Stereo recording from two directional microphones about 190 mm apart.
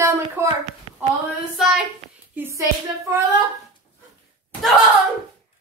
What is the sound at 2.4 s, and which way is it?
Speech, 15° right (ahead or behind).